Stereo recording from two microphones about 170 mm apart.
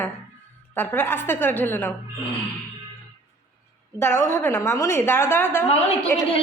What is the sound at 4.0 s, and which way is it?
A woman's voice, 15° left (ahead or behind).